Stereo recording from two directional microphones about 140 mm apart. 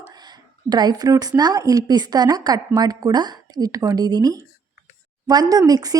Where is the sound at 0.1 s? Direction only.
30° right (ahead or behind).